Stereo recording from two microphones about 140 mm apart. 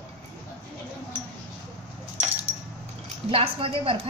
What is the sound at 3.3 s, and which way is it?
Speech, 40° right (ahead or behind).